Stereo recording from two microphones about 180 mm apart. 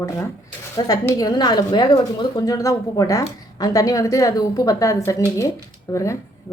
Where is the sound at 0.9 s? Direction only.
20° left (ahead or behind).